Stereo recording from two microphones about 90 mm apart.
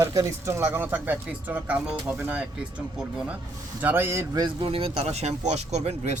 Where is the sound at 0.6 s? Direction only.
25° right (ahead or behind).